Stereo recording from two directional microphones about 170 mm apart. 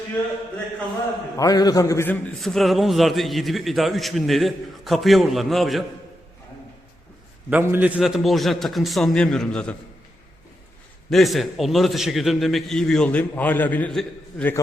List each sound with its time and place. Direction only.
1.4 s a man's voice: 20° left (ahead or behind)
2.4 s a man's voice: centre (ahead or behind)
7.5 s a man's voice: 10° right (ahead or behind); by 9.7 s 5° left (ahead or behind)
11.1 s a man's voice: centre (ahead or behind)